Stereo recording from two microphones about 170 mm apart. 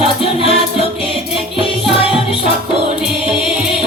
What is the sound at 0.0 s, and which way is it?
Music, 35° left (ahead or behind).